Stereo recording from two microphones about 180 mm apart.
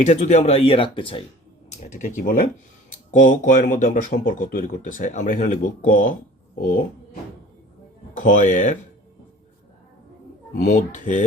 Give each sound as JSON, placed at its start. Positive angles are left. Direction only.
{"t": 0.0, "sound": "speech", "side_deg": 40}
{"t": 1.9, "sound": "speech", "side_deg": 45}
{"t": 8.1, "sound": "speech", "side_deg": 45}
{"t": 10.6, "sound": "speech", "side_deg": 45}